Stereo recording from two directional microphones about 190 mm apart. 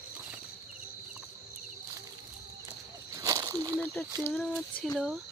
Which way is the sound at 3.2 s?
15° right (ahead or behind).